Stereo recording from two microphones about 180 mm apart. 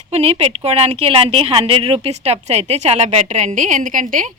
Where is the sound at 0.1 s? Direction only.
35° right (ahead or behind).